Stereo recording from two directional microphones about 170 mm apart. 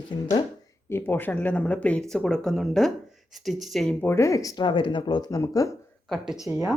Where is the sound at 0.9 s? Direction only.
10° left (ahead or behind).